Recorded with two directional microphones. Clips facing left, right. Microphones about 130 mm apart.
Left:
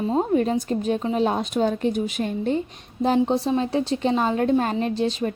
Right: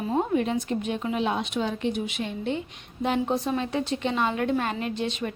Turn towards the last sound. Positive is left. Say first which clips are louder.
# left 6 dB
turn(degrees=35)  # may be behind; listen again after turning